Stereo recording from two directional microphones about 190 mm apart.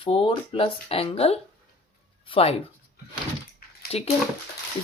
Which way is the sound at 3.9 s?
30° left (ahead or behind).